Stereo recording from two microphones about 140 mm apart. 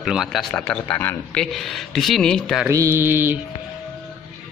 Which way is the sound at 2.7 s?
20° right (ahead or behind).